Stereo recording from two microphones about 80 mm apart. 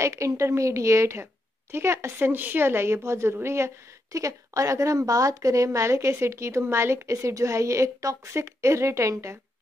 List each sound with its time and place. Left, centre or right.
0.0 s a woman's voice: right